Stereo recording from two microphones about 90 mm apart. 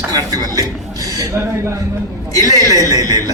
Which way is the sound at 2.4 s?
45° right (ahead or behind).